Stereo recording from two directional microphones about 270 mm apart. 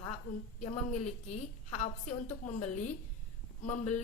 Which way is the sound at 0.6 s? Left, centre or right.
Left.